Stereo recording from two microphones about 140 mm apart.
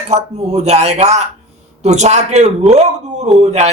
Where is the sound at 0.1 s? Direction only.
50° right (ahead or behind).